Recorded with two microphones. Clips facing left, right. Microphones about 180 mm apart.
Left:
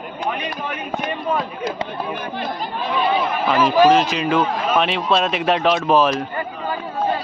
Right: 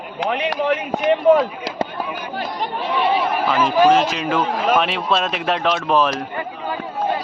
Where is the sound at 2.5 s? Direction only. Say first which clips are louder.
Right 3 dB; 70° right (ahead or behind).